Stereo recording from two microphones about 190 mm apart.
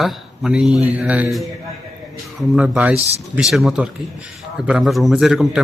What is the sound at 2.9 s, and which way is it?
Speech, 35° right (ahead or behind).